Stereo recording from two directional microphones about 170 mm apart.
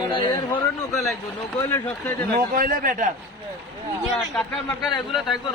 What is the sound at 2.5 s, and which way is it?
Speech, 55° right (ahead or behind).